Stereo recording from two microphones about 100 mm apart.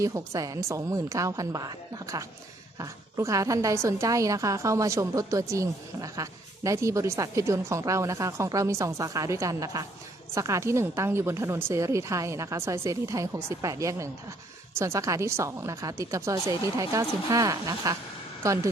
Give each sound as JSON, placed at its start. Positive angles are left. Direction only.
{"t": 0.0, "sound": "a woman's voice", "side_deg": -35}